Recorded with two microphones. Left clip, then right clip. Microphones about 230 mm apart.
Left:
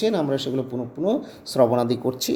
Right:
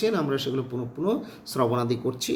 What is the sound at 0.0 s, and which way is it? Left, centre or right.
Speech, centre.